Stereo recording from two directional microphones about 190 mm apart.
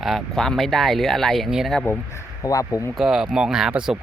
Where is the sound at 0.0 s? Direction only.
Centre (ahead or behind).